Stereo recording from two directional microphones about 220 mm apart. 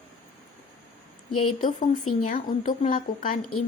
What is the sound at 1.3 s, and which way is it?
Speech, 90° left.